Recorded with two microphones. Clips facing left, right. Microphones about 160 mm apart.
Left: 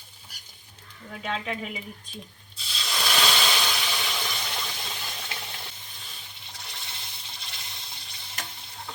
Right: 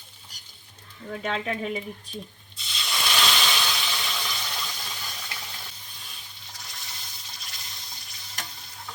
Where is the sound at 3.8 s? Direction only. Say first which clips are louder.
Left 1 dB; 15° left (ahead or behind).